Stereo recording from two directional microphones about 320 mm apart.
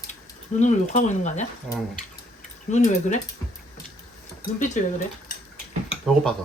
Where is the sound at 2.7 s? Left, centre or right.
Left.